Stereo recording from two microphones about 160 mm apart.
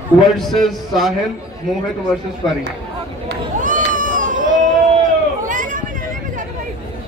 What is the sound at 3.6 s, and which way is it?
Cat, 55° right (ahead or behind).